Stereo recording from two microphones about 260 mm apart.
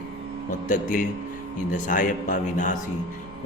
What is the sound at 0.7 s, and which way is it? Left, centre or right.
A man's voice, left.